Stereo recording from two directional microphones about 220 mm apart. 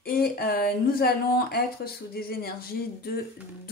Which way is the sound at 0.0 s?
45° left (ahead or behind).